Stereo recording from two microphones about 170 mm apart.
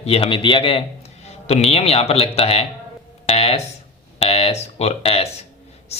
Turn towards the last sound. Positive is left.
turn(degrees=35)  # may be behind; listen again after turning